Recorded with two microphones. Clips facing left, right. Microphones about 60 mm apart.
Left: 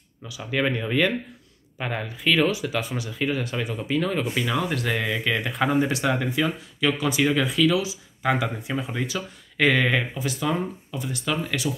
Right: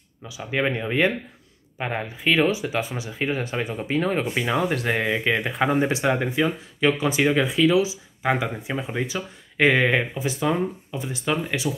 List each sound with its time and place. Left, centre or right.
0.3 s speech: right